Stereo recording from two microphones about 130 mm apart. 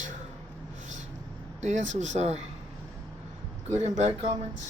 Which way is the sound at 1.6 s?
65° right (ahead or behind).